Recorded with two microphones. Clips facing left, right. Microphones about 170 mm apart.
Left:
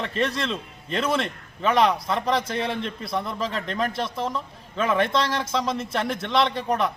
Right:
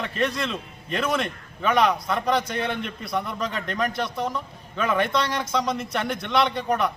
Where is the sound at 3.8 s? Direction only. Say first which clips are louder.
Right 1 dB; 30° left (ahead or behind).